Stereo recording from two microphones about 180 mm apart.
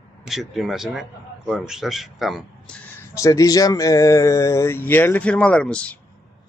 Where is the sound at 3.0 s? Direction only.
15° left (ahead or behind).